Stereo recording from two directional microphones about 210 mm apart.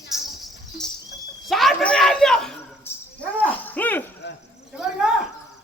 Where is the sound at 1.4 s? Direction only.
Centre (ahead or behind).